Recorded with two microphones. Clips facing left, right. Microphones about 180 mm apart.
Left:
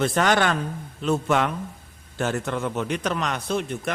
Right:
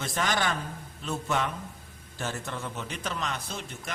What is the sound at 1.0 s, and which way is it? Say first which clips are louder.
A man's voice: left 8 dB; 80° left.